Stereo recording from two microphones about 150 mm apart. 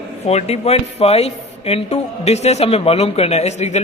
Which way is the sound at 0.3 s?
45° left (ahead or behind).